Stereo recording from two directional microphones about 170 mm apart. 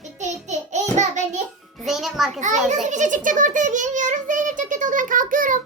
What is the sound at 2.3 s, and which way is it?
A child's voice, 45° right (ahead or behind).